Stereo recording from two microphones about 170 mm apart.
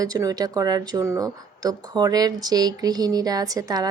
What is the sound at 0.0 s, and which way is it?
Speech, 20° right (ahead or behind).